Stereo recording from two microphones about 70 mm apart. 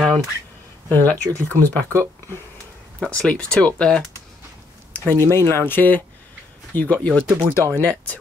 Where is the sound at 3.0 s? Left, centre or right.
Centre.